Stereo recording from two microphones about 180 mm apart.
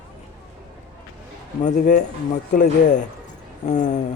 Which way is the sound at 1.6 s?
50° left (ahead or behind).